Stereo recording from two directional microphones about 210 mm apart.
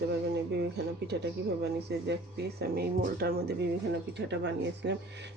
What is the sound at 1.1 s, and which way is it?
Speech, 55° right (ahead or behind).